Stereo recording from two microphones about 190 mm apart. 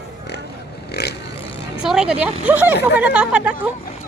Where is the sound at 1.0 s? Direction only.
60° left (ahead or behind).